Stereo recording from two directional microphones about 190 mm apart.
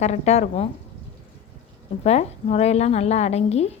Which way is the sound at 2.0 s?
35° left (ahead or behind).